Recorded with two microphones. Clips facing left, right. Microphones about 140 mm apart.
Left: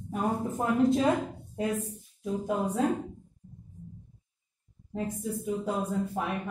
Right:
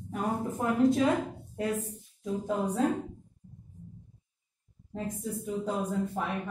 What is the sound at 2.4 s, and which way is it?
Speech, 10° left (ahead or behind).